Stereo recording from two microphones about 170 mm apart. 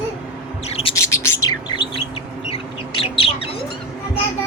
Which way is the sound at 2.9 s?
30° left (ahead or behind).